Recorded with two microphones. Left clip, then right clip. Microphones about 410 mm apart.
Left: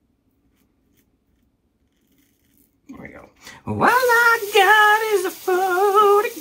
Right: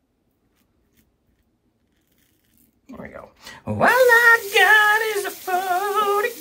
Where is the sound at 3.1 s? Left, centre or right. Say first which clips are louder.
Right 2 dB; centre.